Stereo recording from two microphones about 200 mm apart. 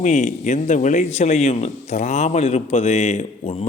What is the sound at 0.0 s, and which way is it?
A man's voice, 35° left (ahead or behind).